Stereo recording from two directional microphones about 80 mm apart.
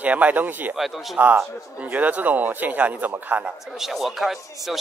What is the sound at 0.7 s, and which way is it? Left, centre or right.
Speech, centre.